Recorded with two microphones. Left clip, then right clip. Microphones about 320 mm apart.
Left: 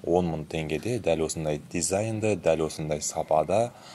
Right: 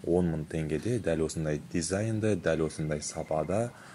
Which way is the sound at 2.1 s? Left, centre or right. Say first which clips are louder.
Left 3 dB; left.